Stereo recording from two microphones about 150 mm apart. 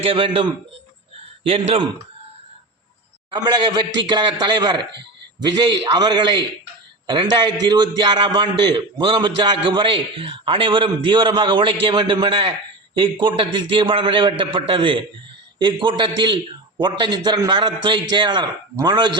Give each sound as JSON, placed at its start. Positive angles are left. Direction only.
{"t": 0.0, "sound": "a man's voice", "side_deg": -35}
{"t": 3.3, "sound": "a man's voice", "side_deg": -30}